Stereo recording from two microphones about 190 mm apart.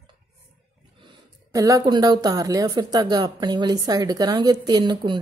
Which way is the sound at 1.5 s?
20° right (ahead or behind).